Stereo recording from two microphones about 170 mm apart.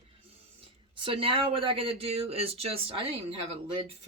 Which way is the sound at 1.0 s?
30° right (ahead or behind).